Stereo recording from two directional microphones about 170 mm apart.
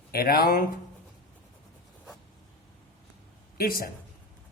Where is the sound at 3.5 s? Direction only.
60° left (ahead or behind).